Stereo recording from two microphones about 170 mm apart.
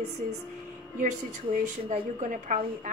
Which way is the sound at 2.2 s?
50° right (ahead or behind).